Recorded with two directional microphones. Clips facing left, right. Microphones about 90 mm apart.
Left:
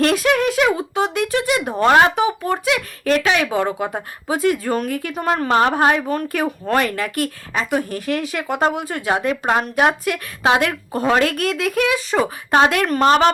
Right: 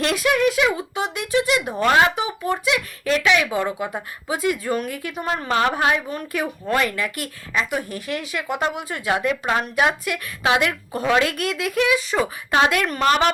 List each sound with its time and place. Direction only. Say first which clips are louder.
0.0 s speech: left 3 dB; 40° left (ahead or behind)